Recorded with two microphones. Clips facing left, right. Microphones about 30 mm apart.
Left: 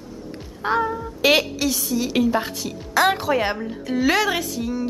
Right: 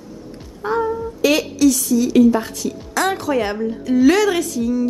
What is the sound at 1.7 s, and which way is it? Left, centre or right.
Speech, centre.